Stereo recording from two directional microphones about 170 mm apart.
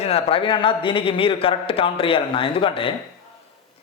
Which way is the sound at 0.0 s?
35° left (ahead or behind).